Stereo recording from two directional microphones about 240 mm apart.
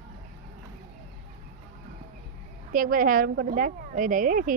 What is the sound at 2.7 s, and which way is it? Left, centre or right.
A woman's voice, right.